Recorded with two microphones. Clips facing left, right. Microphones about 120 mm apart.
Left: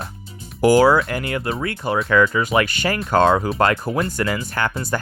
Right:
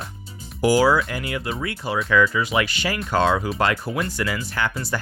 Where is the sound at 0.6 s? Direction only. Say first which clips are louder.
Left 4 dB; 55° left (ahead or behind).